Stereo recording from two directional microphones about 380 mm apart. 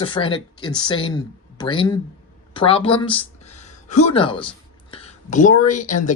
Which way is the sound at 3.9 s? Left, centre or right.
Centre.